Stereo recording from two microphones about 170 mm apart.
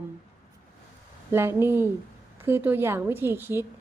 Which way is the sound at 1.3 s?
15° right (ahead or behind).